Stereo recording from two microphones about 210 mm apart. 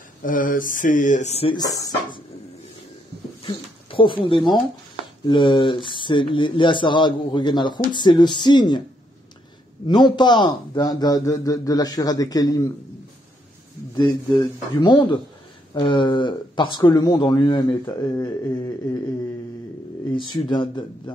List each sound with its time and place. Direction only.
0.2 s a sound: 40° left (ahead or behind); by 2.2 s 20° left (ahead or behind)
3.4 s speech: 25° left (ahead or behind)
9.8 s a man's voice: 20° left (ahead or behind)
13.9 s speech: 20° left (ahead or behind)
20.4 s speech: 20° left (ahead or behind)